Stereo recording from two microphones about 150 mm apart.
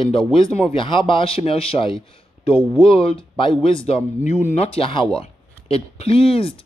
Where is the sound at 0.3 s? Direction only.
35° left (ahead or behind).